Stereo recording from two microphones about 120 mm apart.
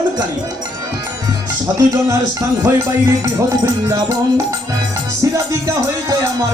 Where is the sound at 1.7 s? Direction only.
25° right (ahead or behind).